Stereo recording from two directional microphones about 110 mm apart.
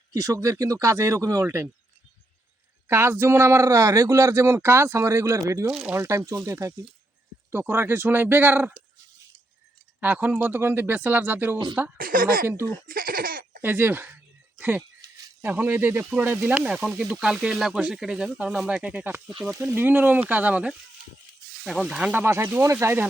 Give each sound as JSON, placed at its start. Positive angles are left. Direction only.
{"t": 0.1, "sound": "speech", "side_deg": -30}
{"t": 2.8, "sound": "speech", "side_deg": -25}
{"t": 5.6, "sound": "speech", "side_deg": -5}
{"t": 5.9, "sound": "speech", "side_deg": -25}
{"t": 10.0, "sound": "speech", "side_deg": -15}
{"t": 13.6, "sound": "speech", "side_deg": -20}
{"t": 15.0, "sound": "a sound", "side_deg": -30}
{"t": 15.4, "sound": "speech", "side_deg": -20}